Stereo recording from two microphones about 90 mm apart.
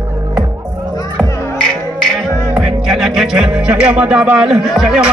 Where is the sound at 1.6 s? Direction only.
10° left (ahead or behind).